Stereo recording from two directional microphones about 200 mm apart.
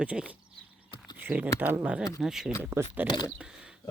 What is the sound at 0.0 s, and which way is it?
Speech, 5° right (ahead or behind).